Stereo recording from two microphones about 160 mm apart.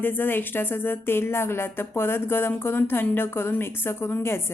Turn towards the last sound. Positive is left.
turn(degrees=15)  # may be behind; listen again after turning